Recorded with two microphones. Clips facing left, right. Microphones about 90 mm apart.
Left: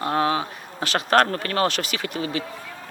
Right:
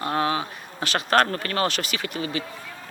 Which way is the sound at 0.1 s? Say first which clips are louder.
Left 2 dB; 90° left.